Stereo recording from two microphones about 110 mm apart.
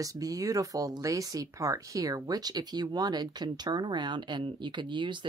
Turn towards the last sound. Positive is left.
turn(degrees=-45)  # may be behind; listen again after turning